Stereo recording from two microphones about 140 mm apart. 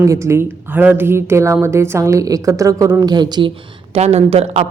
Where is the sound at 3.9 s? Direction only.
50° right (ahead or behind).